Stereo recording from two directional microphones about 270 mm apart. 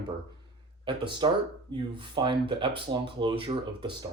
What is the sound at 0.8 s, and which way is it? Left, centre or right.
Speech, centre.